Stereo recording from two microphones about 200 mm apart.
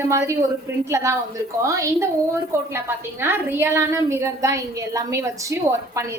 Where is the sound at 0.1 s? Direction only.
15° right (ahead or behind).